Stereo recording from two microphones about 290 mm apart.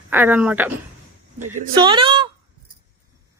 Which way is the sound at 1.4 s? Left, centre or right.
Right.